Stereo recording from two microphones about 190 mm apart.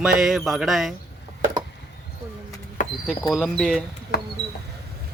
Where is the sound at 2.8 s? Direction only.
45° left (ahead or behind).